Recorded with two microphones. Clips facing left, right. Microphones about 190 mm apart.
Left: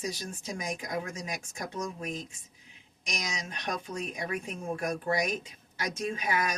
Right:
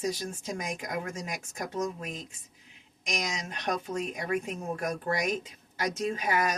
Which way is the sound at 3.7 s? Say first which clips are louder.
Right 4 dB; 40° right (ahead or behind).